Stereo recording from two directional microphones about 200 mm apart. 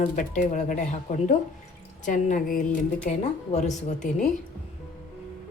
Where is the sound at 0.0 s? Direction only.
40° left (ahead or behind).